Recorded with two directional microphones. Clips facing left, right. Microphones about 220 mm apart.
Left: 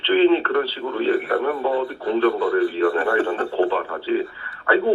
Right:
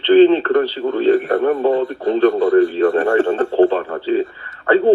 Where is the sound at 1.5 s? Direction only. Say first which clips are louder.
Right 6 dB; 45° right (ahead or behind).